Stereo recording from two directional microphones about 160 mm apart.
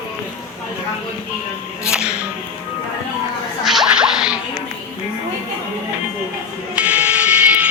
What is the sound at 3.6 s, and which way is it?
Whip, centre (ahead or behind).